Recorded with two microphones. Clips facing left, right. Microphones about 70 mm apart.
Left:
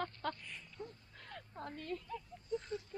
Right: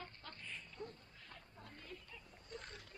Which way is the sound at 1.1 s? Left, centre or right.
Left.